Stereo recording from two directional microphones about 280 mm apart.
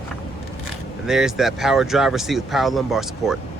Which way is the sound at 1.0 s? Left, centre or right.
Centre.